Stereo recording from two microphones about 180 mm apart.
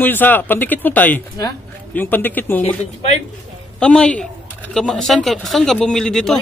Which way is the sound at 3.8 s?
5° left (ahead or behind).